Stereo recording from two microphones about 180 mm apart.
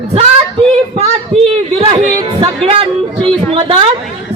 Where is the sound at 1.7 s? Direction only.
25° right (ahead or behind).